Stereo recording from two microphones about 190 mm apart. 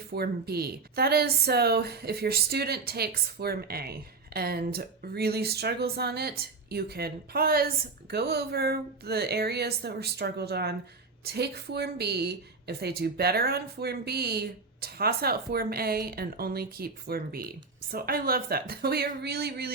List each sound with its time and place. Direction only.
0.1 s a woman's voice: 55° right (ahead or behind)